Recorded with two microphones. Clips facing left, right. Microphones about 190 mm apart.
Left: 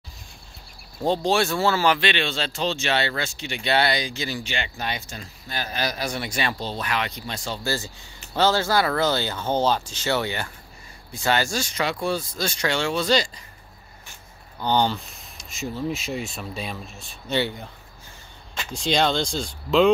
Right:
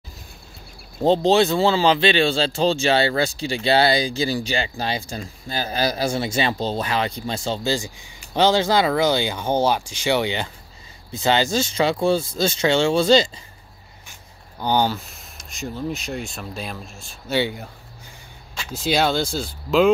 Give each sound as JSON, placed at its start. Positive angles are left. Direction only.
{"t": 1.0, "sound": "speech", "side_deg": -25}
{"t": 14.6, "sound": "speech", "side_deg": -10}